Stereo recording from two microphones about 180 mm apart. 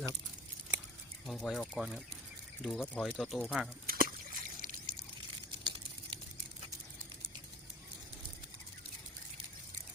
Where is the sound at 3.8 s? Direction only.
55° right (ahead or behind).